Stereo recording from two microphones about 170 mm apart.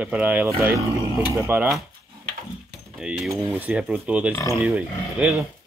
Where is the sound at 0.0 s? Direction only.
5° right (ahead or behind).